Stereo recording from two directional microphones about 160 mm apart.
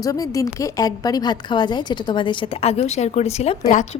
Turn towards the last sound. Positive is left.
turn(degrees=50)  # may be behind; listen again after turning